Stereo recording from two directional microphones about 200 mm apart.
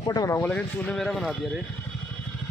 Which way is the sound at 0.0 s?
20° left (ahead or behind).